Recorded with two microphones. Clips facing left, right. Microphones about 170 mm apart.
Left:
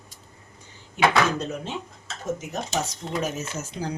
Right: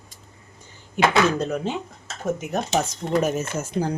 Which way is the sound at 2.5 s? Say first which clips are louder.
Right 5 dB; 55° right (ahead or behind).